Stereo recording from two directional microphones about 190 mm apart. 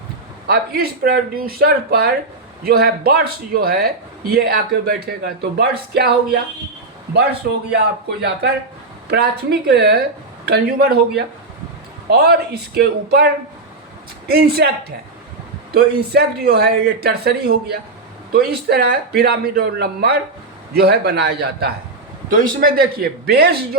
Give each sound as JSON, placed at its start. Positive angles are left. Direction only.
{"t": 0.4, "sound": "speech", "side_deg": -55}
{"t": 22.3, "sound": "speech", "side_deg": -45}